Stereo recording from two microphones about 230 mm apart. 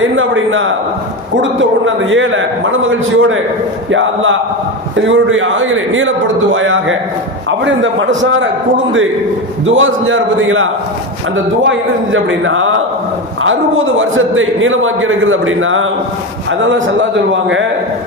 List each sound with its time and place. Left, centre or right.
0.2 s a man's voice: right
9.6 s a man's voice: right